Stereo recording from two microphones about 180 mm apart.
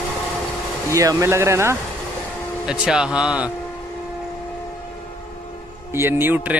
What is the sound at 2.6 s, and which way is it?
Speech, 5° right (ahead or behind).